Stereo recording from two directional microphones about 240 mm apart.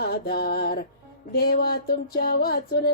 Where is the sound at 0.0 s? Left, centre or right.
Left.